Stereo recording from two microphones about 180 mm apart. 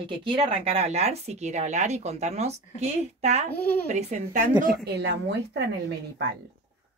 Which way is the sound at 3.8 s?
40° right (ahead or behind).